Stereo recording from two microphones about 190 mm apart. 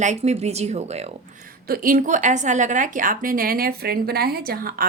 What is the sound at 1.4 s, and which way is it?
A woman's voice, 50° right (ahead or behind).